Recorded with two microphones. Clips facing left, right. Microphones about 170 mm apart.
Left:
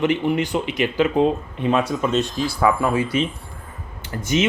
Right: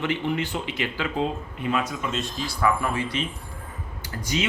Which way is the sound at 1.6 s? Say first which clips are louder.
Left 6 dB; 30° left (ahead or behind).